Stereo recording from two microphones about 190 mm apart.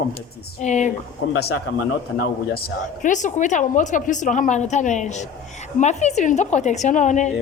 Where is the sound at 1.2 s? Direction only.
90° left.